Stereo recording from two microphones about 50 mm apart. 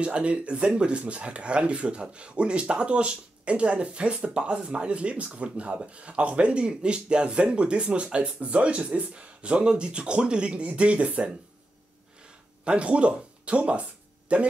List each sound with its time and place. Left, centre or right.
0.0 s speech: right
12.6 s speech: right